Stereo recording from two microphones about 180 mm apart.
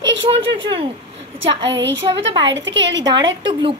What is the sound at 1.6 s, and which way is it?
A woman's voice, 85° right.